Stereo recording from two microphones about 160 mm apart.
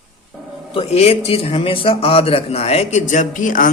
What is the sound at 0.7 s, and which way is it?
A man's voice, 40° left (ahead or behind).